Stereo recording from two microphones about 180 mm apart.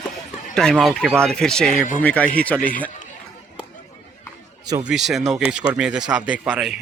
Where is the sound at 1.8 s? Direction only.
45° left (ahead or behind).